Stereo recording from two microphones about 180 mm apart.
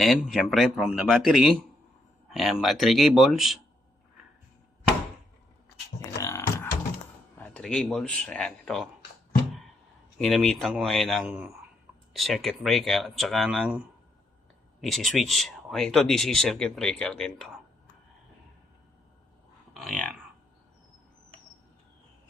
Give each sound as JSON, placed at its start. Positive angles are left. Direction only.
{"t": 0.0, "sound": "speech", "side_deg": 0}
{"t": 6.0, "sound": "beatboxing", "side_deg": 15}
{"t": 7.3, "sound": "speech", "side_deg": 5}
{"t": 10.2, "sound": "speech", "side_deg": 0}
{"t": 19.7, "sound": "speech", "side_deg": 0}